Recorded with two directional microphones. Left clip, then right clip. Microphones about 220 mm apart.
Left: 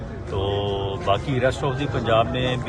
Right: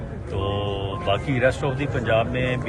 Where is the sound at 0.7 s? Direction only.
10° left (ahead or behind).